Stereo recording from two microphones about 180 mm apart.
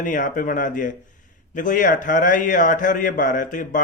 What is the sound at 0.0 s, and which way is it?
A man's voice, 45° left (ahead or behind).